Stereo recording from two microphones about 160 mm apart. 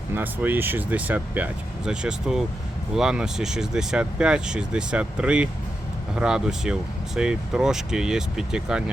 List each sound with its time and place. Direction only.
0.1 s speech: 10° right (ahead or behind)